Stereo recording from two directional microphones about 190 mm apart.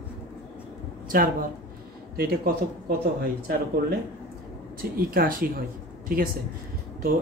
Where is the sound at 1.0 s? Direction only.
50° right (ahead or behind).